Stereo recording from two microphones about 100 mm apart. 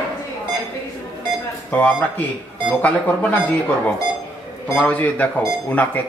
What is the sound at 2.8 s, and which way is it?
Speech, 15° left (ahead or behind).